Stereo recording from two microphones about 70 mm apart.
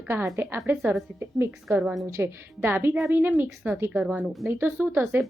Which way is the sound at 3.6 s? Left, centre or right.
Right.